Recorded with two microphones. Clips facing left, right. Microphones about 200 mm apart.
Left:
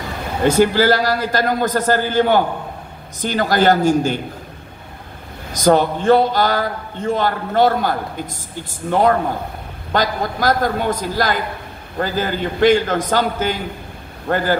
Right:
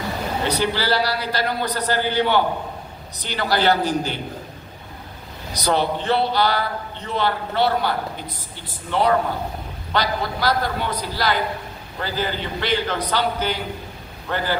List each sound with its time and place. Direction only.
0.4 s a man's voice: 45° left (ahead or behind)
5.5 s a man's voice: 45° left (ahead or behind)